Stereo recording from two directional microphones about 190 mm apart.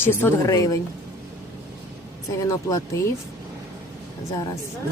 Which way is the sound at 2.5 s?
15° left (ahead or behind).